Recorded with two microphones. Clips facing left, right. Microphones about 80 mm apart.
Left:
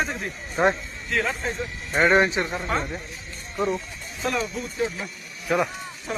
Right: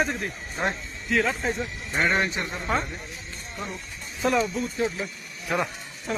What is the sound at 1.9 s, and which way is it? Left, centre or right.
Speech, left.